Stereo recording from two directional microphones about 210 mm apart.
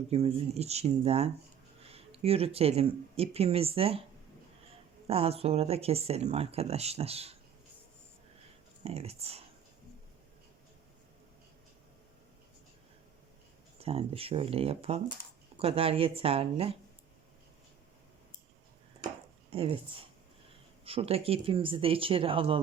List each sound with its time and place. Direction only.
0.1 s speech: 30° right (ahead or behind)
5.0 s speech: 30° right (ahead or behind)
8.8 s speech: 30° right (ahead or behind)
13.8 s speech: 25° right (ahead or behind)
19.0 s chopping: 25° right (ahead or behind)
20.8 s speech: 25° right (ahead or behind)